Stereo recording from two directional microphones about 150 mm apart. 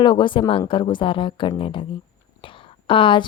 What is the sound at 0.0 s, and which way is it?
A woman's voice, 30° left (ahead or behind).